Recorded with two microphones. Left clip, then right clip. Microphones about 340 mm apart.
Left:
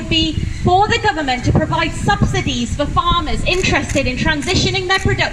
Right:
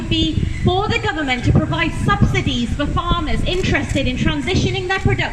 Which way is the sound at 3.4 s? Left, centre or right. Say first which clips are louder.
Left 4 dB; left.